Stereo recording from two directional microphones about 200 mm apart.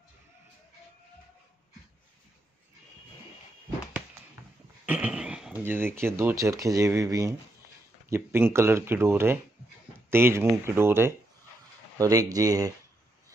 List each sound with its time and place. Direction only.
4.8 s speech: 10° right (ahead or behind)